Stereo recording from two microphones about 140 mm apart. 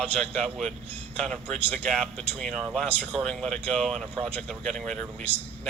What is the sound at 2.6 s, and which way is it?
Speech, 5° right (ahead or behind).